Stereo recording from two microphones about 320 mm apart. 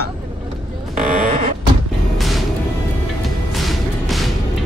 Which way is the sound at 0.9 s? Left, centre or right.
Right.